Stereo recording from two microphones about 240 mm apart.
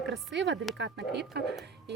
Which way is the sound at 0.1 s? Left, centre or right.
Right.